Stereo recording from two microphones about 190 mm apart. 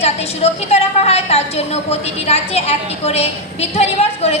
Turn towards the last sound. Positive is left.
turn(degrees=35)  # may be behind; listen again after turning